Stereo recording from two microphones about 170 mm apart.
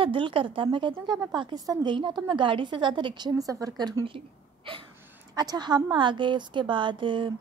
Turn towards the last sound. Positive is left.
turn(degrees=-30)  # may be behind; listen again after turning